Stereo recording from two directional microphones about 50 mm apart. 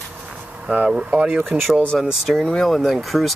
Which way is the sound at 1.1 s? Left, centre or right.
Right.